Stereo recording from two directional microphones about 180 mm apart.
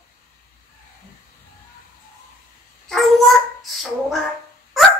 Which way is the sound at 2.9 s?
Centre (ahead or behind).